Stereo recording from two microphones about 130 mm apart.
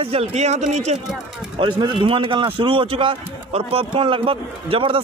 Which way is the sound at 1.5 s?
40° right (ahead or behind).